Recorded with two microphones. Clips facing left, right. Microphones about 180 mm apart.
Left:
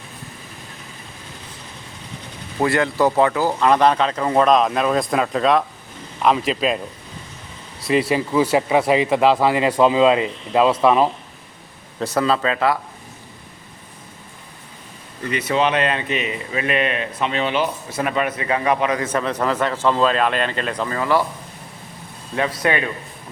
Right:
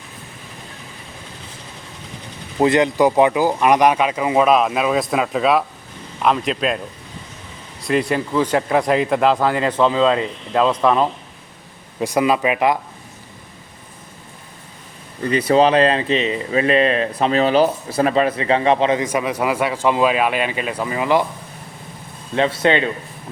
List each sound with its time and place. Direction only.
2.6 s speech: 20° right (ahead or behind); by 6.7 s centre (ahead or behind)
7.9 s speech: 5° left (ahead or behind)
11.9 s speech: 10° right (ahead or behind)
15.3 s speech: 35° right (ahead or behind)
19.0 s speech: 10° right (ahead or behind)
22.4 s speech: 25° right (ahead or behind)